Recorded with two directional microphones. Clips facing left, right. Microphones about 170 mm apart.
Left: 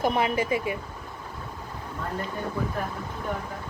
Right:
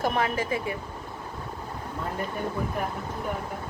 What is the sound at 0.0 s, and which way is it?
Speech, 15° left (ahead or behind).